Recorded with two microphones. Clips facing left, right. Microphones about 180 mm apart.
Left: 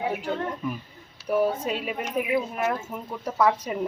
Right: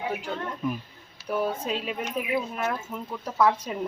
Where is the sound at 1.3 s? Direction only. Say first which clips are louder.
Left 4 dB; 10° left (ahead or behind).